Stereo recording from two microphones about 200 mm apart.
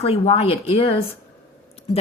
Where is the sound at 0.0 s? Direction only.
30° left (ahead or behind).